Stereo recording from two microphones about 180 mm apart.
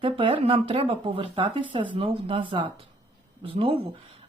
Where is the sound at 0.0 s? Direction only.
30° right (ahead or behind).